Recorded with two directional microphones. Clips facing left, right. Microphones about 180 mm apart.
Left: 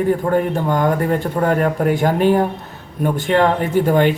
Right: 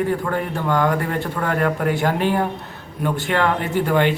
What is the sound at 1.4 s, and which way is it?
Speech, 30° left (ahead or behind).